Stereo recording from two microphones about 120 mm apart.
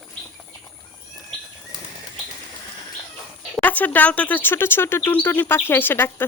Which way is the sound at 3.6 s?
15° left (ahead or behind).